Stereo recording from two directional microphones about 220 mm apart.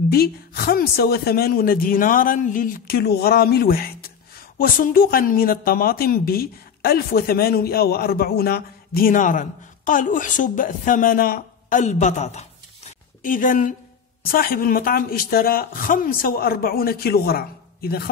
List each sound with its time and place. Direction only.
0.1 s a woman's voice: 45° left (ahead or behind)